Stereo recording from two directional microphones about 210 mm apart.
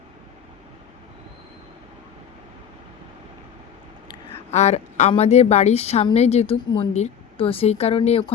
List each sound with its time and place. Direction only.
4.5 s a woman's voice: 30° left (ahead or behind)